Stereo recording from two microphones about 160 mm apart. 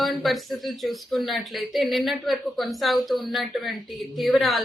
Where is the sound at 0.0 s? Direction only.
Centre (ahead or behind).